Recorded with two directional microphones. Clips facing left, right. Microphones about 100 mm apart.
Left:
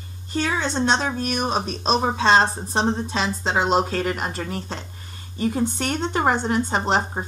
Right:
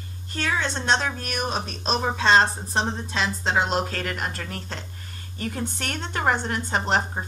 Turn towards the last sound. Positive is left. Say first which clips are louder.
# left 2 dB
turn(degrees=25)  # may be behind; listen again after turning